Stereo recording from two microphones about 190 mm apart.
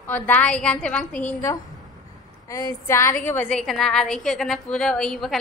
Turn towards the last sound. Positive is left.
turn(degrees=0)  # may be behind; listen again after turning